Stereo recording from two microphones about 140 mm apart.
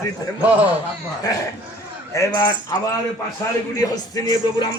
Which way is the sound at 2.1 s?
20° left (ahead or behind).